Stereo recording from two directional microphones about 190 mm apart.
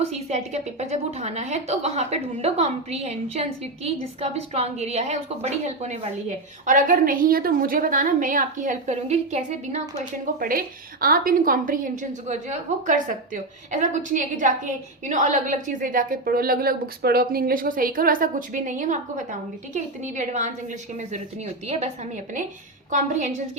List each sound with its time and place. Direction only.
0.0 s a woman's voice: 35° right (ahead or behind)
10.0 s a woman's voice: 50° right (ahead or behind)
21.7 s a woman's voice: 35° right (ahead or behind)